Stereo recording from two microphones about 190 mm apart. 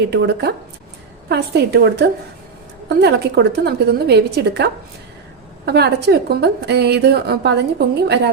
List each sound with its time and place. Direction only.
0.1 s a woman's voice: 60° right (ahead or behind)